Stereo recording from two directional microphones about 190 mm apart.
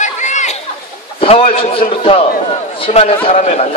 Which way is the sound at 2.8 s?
35° left (ahead or behind).